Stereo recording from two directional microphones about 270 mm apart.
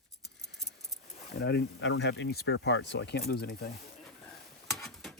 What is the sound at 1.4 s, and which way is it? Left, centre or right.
Speech, left.